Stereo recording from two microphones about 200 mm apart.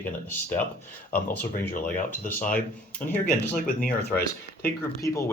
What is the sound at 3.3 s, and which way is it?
Speech, 45° left (ahead or behind).